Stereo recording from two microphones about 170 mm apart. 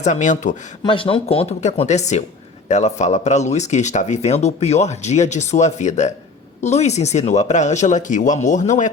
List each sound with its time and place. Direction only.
0.0 s speech: 45° left (ahead or behind)
0.9 s speech: 30° left (ahead or behind)